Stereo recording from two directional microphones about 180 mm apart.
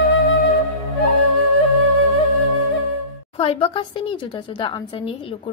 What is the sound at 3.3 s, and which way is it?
A woman's voice, 30° left (ahead or behind).